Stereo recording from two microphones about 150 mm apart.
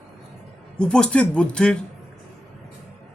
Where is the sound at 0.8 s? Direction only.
5° left (ahead or behind).